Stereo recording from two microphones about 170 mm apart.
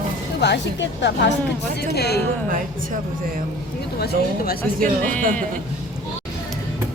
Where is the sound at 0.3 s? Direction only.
80° left.